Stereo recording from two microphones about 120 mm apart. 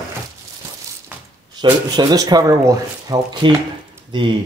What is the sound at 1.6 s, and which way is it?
Speech, 35° right (ahead or behind).